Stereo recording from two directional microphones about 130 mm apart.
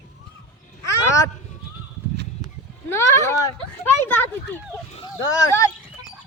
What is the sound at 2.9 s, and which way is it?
Speech, 20° left (ahead or behind).